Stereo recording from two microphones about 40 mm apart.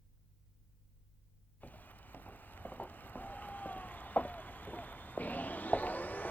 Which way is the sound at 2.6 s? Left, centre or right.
Left.